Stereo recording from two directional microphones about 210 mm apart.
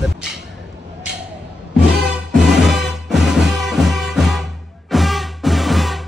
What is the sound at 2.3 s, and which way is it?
Music, centre (ahead or behind).